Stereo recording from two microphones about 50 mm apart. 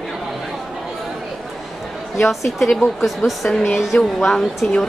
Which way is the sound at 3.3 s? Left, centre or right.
Centre.